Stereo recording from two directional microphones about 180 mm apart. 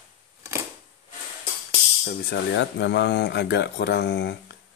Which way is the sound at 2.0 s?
70° left (ahead or behind).